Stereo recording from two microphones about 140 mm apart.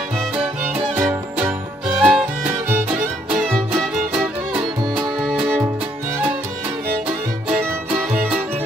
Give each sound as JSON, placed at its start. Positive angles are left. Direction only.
{"t": 0.4, "sound": "music", "side_deg": -10}
{"t": 4.6, "sound": "music", "side_deg": -30}
{"t": 7.5, "sound": "music", "side_deg": -10}